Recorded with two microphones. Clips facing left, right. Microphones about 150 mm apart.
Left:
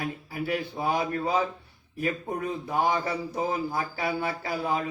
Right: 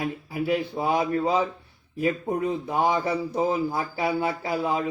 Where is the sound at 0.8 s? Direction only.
30° right (ahead or behind).